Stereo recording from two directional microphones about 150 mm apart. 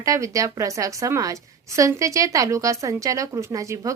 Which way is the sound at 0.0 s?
20° right (ahead or behind).